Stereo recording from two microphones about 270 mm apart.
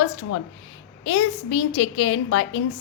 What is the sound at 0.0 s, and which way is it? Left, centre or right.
A woman's voice, left.